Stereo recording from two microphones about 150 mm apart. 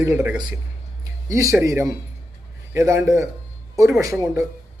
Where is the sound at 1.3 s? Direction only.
20° right (ahead or behind).